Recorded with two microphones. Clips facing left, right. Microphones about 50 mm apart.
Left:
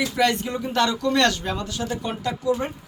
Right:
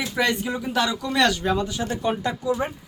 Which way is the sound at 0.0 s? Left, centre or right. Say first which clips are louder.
Left 2 dB; centre.